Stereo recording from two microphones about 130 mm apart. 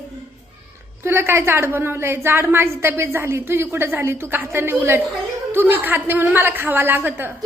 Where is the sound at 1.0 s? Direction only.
20° right (ahead or behind).